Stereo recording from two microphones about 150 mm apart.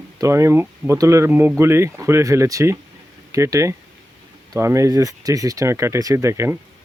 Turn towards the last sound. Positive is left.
turn(degrees=-20)  # may be behind; listen again after turning